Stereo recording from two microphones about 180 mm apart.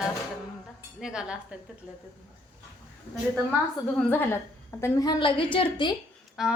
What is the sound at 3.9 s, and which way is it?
A woman's voice, 10° left (ahead or behind).